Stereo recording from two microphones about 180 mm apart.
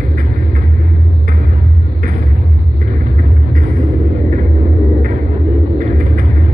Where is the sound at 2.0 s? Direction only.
45° right (ahead or behind).